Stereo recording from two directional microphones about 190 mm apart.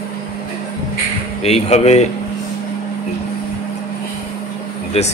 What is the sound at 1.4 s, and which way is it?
Speech, 35° left (ahead or behind).